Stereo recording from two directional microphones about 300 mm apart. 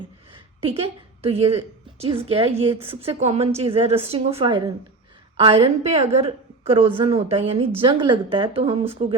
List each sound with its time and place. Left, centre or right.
0.6 s a woman's voice: centre